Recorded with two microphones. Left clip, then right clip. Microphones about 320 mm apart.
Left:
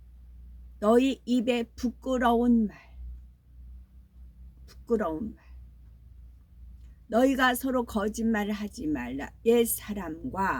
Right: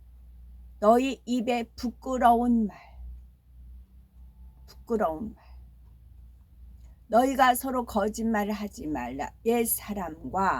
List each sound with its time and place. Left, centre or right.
0.8 s a woman's voice: centre
4.6 s a sound: centre
7.1 s a woman's voice: centre